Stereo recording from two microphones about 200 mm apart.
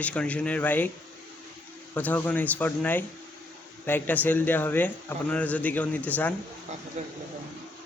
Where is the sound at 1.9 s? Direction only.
10° left (ahead or behind).